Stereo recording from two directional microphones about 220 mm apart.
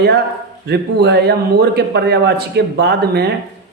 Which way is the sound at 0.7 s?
50° right (ahead or behind).